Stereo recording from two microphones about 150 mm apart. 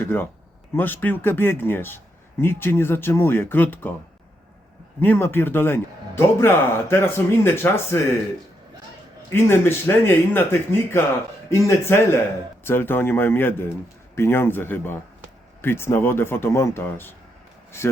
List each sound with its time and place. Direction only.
0.0 s a man's voice: 15° left (ahead or behind)
4.9 s a man's voice: 15° left (ahead or behind)
9.3 s a man's voice: 15° left (ahead or behind)